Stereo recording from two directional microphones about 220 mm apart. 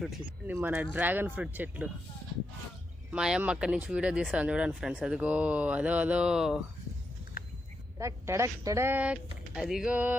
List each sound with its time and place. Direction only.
0.0 s speech: 5° right (ahead or behind)
3.1 s speech: 5° right (ahead or behind)
7.4 s a sound: 40° left (ahead or behind)
7.9 s speech: 15° right (ahead or behind)